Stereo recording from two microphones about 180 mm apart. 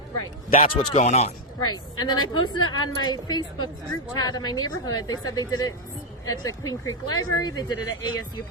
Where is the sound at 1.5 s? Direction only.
25° left (ahead or behind).